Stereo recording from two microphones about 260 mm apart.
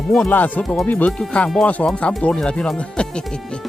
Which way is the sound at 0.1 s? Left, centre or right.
Centre.